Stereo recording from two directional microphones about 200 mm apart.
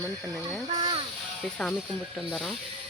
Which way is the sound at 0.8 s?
25° right (ahead or behind).